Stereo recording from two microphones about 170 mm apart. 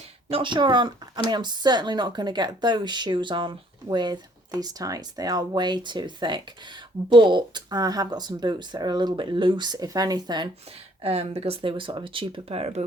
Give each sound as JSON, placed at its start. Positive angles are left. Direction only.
{"t": 0.3, "sound": "speech", "side_deg": -30}
{"t": 11.0, "sound": "speech", "side_deg": -35}